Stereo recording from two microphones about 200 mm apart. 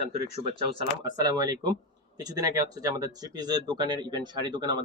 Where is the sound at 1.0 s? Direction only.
20° right (ahead or behind).